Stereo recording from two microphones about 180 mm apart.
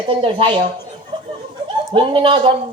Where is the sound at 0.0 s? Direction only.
30° right (ahead or behind).